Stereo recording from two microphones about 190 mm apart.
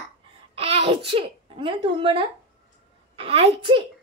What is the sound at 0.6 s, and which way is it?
A child's voice, 30° right (ahead or behind).